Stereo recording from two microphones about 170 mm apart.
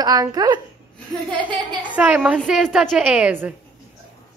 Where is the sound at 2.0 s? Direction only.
10° right (ahead or behind).